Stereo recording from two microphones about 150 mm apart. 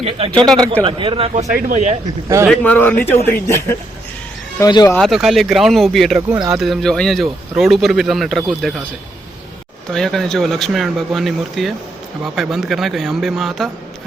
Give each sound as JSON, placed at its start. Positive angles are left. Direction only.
{"t": 0.0, "sound": "speech", "side_deg": -40}
{"t": 1.5, "sound": "speech", "side_deg": -60}
{"t": 2.5, "sound": "speech", "side_deg": 10}
{"t": 4.9, "sound": "speech", "side_deg": 0}
{"t": 9.9, "sound": "speech", "side_deg": 0}